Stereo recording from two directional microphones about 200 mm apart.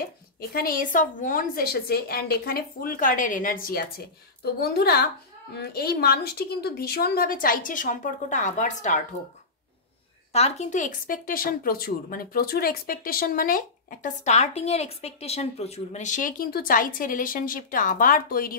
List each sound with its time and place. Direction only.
0.4 s speech: 50° left (ahead or behind)
10.3 s speech: 35° left (ahead or behind)